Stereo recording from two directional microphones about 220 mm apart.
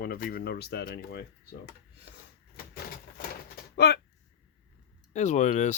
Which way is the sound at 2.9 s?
45° left (ahead or behind).